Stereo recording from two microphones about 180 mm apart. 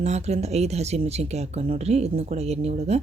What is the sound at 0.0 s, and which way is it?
Speech, 35° right (ahead or behind).